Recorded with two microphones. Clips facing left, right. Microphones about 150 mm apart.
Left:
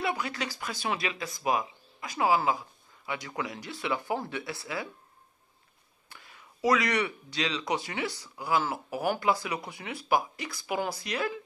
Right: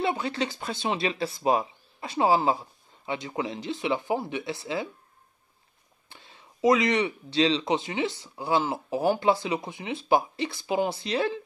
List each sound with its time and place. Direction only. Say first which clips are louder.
0.0 s speech: right 4 dB; 25° right (ahead or behind)
6.0 s speech: right 1 dB; 25° right (ahead or behind)